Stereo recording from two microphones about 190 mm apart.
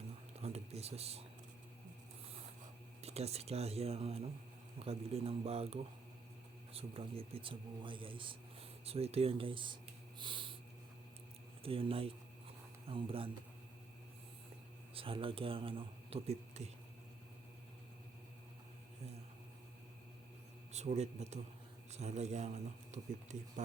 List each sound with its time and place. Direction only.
0.3 s a sound: 35° right (ahead or behind)
3.0 s a man's voice: 35° right (ahead or behind)
10.2 s snort: 25° right (ahead or behind)
11.6 s speech: 30° right (ahead or behind)
14.9 s a man's voice: 30° right (ahead or behind)
20.7 s a man's voice: 35° right (ahead or behind)